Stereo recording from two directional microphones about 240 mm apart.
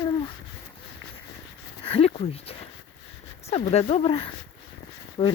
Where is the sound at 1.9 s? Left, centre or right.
Left.